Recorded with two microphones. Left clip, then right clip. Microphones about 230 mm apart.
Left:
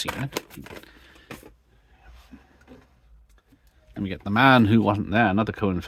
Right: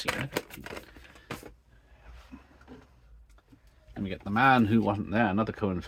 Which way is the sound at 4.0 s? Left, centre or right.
Left.